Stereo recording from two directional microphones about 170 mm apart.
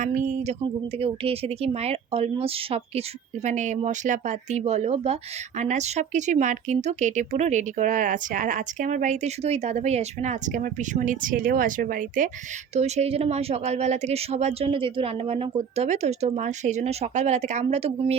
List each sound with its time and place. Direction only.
0.0 s speech: 45° right (ahead or behind)
0.6 s speech: 35° right (ahead or behind); by 12.3 s 50° right (ahead or behind)
12.7 s speech: 40° right (ahead or behind)